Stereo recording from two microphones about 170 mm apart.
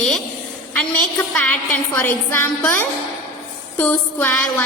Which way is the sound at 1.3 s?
10° left (ahead or behind).